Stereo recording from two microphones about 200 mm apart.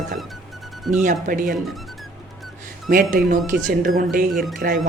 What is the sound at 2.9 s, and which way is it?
Speech, 45° right (ahead or behind).